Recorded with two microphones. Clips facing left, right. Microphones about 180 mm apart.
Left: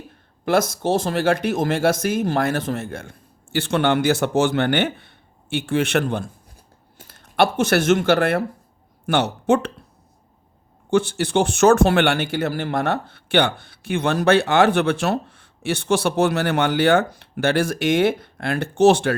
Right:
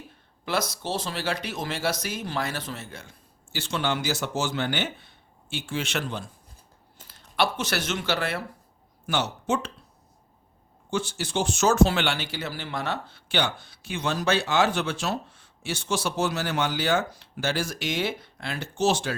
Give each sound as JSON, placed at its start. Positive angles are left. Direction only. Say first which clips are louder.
{"t": 0.4, "sound": "speech", "louder": "left 9 dB", "side_deg": 50}
{"t": 10.9, "sound": "speech", "louder": "left 9 dB", "side_deg": 60}